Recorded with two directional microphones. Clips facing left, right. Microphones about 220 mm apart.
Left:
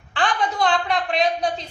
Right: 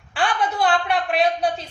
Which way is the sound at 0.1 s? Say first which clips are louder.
Even; 10° right (ahead or behind).